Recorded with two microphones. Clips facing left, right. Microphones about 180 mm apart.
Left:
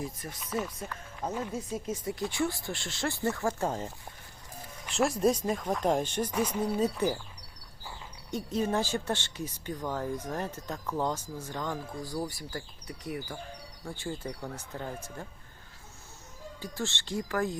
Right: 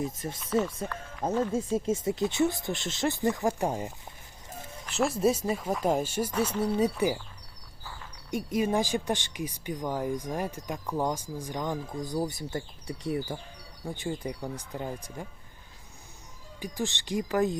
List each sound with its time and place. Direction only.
0.0 s speech: 25° right (ahead or behind)
1.5 s speech: 25° right (ahead or behind)
4.9 s speech: centre (ahead or behind)
6.3 s speech: 10° left (ahead or behind)
6.7 s speech: 10° right (ahead or behind)
8.3 s speech: 10° right (ahead or behind)
16.6 s speech: 15° right (ahead or behind)